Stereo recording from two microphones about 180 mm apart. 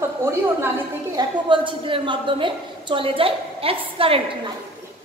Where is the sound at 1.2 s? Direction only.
25° right (ahead or behind).